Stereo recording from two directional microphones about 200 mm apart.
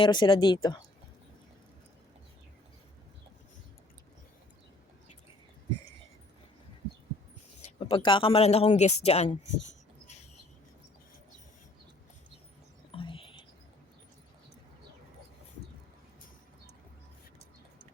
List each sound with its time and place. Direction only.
0.0 s speech: 25° left (ahead or behind)
7.9 s speech: 25° left (ahead or behind)
12.9 s whispering: 25° left (ahead or behind)